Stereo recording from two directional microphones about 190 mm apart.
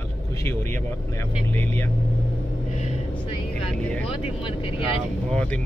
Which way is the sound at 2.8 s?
30° left (ahead or behind).